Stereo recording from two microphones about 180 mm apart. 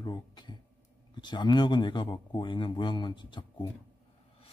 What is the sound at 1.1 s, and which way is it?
Speech, 25° left (ahead or behind).